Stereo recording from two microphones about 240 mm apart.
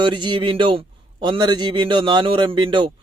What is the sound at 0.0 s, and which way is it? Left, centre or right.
A man's voice, centre.